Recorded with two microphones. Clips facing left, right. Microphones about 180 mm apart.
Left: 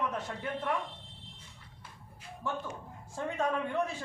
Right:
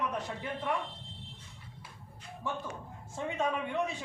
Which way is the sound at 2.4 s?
Centre (ahead or behind).